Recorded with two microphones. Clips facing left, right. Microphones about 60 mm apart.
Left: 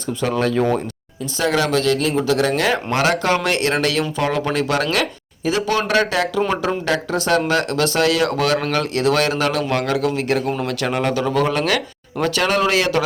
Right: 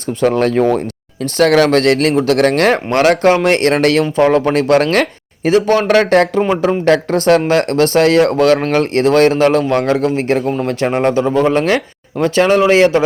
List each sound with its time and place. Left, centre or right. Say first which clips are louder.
0.2 s speech: right 7 dB; right
1.2 s speech: right 8 dB; right
3.0 s speech: right 8 dB; right
4.0 s speech: right 9 dB; right